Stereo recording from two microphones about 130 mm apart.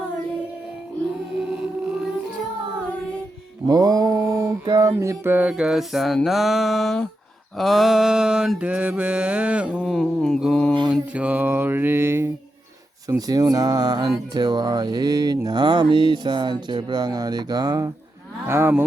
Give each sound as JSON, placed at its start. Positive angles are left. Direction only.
{"t": 3.7, "sound": "mantra", "side_deg": -30}
{"t": 11.1, "sound": "mantra", "side_deg": -10}
{"t": 13.1, "sound": "speech", "side_deg": -30}
{"t": 18.4, "sound": "speech", "side_deg": -20}